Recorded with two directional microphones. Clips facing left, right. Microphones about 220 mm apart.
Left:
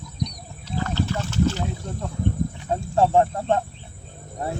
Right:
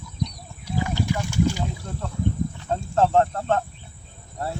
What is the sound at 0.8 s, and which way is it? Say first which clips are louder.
Boat: even; 10° right (ahead or behind).